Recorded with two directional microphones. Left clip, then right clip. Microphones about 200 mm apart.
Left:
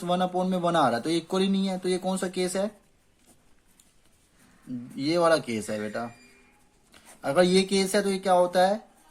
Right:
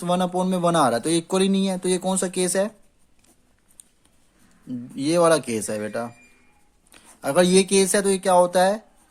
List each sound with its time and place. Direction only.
0.0 s speech: 35° right (ahead or behind)
4.7 s speech: 35° right (ahead or behind)
7.2 s speech: 35° right (ahead or behind)